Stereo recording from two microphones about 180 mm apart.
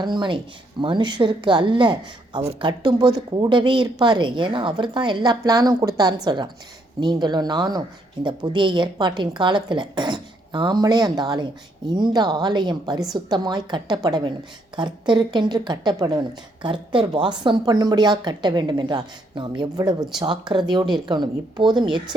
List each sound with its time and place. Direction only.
0.0 s speech: 25° right (ahead or behind)